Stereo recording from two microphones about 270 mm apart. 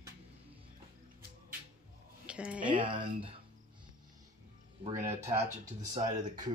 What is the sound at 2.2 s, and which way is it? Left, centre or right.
Speech, centre.